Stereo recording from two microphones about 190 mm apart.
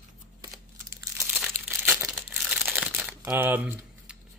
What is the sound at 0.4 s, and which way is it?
Crumpling, 15° right (ahead or behind).